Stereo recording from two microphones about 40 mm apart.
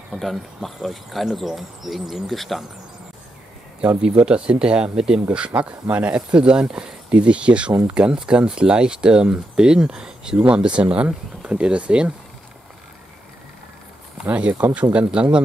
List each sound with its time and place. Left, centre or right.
0.1 s speech: centre
4.0 s speech: right
5.6 s speech: right
14.2 s speech: right